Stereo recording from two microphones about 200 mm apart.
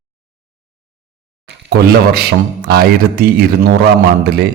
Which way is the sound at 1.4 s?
55° right (ahead or behind).